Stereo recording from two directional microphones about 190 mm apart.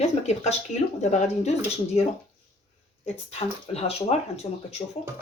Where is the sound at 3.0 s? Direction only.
30° left (ahead or behind).